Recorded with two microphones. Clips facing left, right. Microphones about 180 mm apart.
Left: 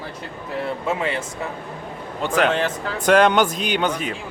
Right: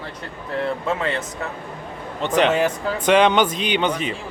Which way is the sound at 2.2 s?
5° left (ahead or behind).